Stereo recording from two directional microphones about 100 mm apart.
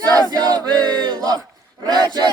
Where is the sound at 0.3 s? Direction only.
40° right (ahead or behind).